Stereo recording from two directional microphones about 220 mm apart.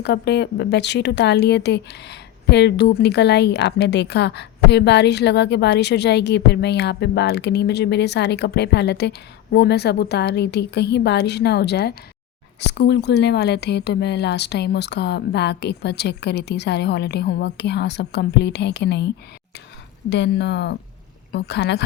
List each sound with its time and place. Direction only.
0.0 s a woman's voice: 50° left (ahead or behind)